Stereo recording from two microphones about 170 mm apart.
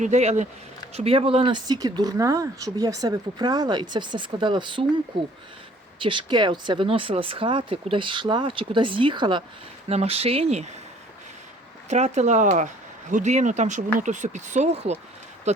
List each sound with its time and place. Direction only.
0.0 s speech: 40° right (ahead or behind)
6.0 s speech: 30° right (ahead or behind)
11.9 s speech: 40° right (ahead or behind)